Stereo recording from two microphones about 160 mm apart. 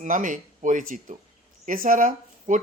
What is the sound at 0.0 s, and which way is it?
Speech, 55° right (ahead or behind).